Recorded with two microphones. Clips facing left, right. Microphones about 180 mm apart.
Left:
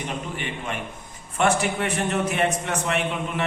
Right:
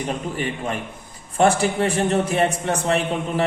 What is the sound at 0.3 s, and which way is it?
A man's voice, 40° right (ahead or behind).